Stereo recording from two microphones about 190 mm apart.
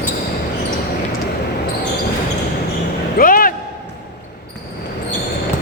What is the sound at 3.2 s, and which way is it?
Basketball bounce, 50° left (ahead or behind).